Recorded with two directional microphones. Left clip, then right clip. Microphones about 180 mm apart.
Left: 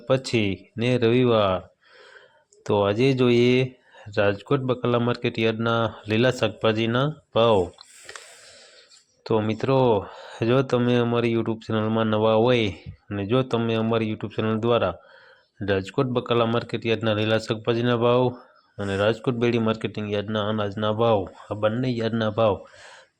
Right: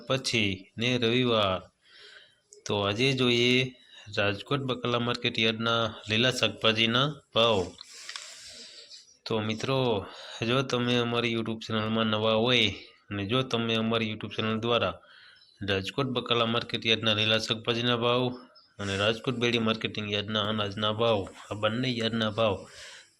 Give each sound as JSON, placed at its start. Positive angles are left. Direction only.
{"t": 0.1, "sound": "speech", "side_deg": 45}
{"t": 2.6, "sound": "speech", "side_deg": 45}
{"t": 9.2, "sound": "speech", "side_deg": 45}